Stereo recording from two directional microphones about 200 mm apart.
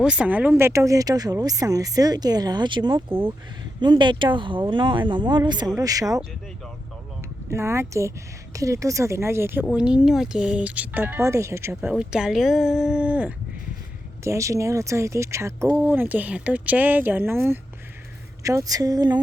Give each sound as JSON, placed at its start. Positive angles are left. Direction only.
{"t": 0.0, "sound": "speech", "side_deg": -5}
{"t": 7.5, "sound": "speech", "side_deg": -15}